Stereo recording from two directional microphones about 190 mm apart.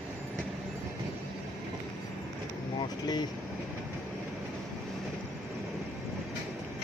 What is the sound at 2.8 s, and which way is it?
Air conditioning, 20° left (ahead or behind).